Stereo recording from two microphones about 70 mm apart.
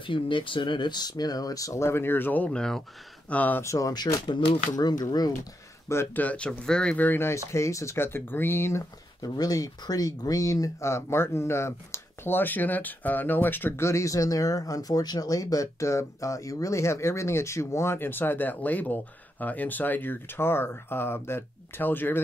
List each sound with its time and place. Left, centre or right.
0.1 s speech: left
1.9 s speech: left
2.5 s speech: centre
3.3 s speech: left
3.6 s speech: left
4.3 s speech: left
6.1 s speech: centre
7.0 s speech: left
7.5 s speech: left
9.2 s speech: left